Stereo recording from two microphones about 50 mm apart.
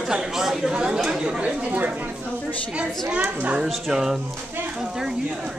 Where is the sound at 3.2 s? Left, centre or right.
Right.